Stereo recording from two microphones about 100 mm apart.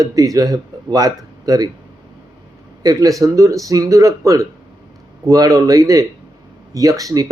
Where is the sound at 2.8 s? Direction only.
35° right (ahead or behind).